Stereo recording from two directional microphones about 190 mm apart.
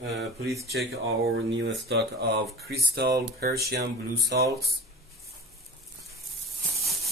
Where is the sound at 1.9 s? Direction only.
60° right (ahead or behind).